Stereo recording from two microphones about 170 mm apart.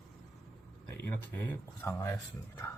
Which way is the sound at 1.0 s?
10° left (ahead or behind).